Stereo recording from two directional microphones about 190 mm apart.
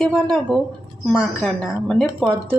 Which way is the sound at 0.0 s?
5° left (ahead or behind).